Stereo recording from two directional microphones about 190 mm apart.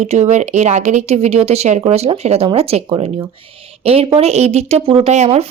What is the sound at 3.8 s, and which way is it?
Speech, 30° right (ahead or behind).